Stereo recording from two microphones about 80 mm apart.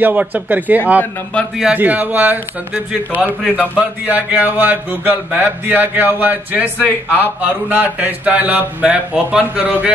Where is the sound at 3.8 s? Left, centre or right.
Centre.